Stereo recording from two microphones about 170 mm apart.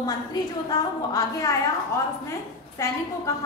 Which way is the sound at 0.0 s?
20° left (ahead or behind).